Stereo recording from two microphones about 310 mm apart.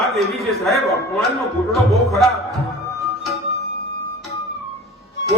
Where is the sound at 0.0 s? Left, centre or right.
Centre.